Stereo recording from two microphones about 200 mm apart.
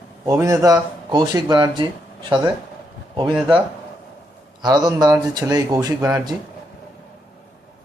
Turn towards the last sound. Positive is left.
turn(degrees=-15)  # may be behind; listen again after turning